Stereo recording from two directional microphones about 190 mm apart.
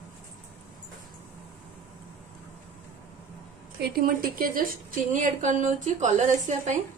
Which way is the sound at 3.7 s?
55° right (ahead or behind).